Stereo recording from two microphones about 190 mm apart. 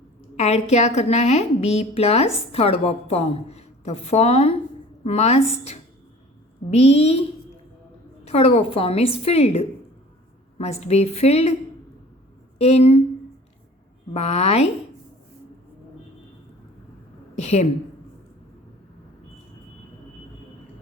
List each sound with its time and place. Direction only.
0.3 s a woman's voice: 35° left (ahead or behind)
12.5 s speech: 35° left (ahead or behind)
14.1 s a woman's voice: 35° left (ahead or behind)
17.3 s a woman's voice: 35° left (ahead or behind)